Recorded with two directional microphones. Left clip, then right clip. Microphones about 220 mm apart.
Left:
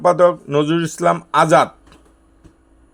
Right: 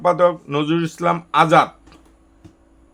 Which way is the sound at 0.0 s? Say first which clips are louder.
Left 3 dB; 20° left (ahead or behind).